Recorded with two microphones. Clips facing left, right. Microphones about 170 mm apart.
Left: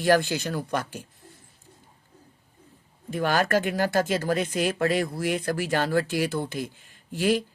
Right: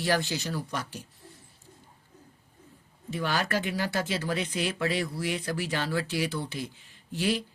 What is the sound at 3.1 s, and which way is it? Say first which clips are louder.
Speech: left 6 dB; 50° left (ahead or behind).